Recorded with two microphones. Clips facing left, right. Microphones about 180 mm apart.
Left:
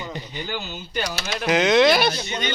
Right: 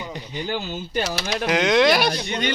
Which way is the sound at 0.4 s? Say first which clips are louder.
Right 4 dB; 35° right (ahead or behind).